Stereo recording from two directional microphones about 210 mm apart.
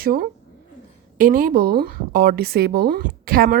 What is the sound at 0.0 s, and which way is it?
Speech, 45° right (ahead or behind).